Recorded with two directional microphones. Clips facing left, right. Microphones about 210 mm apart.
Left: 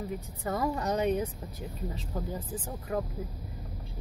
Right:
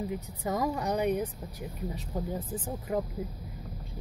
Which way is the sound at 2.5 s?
15° right (ahead or behind).